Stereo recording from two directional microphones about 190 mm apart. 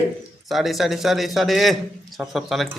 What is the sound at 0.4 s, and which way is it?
A man's voice, centre (ahead or behind).